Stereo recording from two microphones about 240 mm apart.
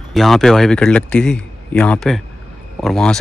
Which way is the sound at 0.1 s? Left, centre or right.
Centre.